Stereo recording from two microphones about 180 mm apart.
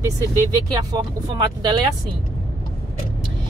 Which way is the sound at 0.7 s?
20° right (ahead or behind).